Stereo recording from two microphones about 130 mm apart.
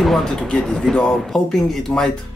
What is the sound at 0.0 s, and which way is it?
Speech, 5° left (ahead or behind).